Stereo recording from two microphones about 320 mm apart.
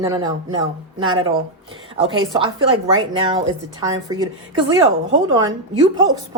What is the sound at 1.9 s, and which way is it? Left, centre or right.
Speech, centre.